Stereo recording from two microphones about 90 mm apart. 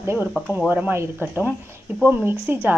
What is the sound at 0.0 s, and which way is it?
A woman's voice, 25° right (ahead or behind).